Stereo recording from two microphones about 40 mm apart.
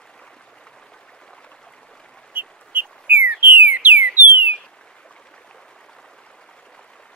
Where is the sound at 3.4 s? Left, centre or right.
Right.